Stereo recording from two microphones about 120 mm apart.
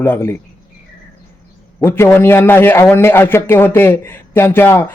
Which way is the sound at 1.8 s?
20° left (ahead or behind).